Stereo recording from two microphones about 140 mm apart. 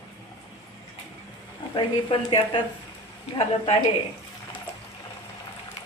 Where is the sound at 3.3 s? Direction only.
40° left (ahead or behind).